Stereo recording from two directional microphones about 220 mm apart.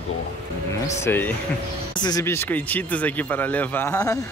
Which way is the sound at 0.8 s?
10° left (ahead or behind).